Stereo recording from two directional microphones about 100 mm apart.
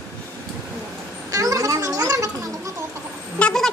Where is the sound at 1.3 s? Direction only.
35° right (ahead or behind).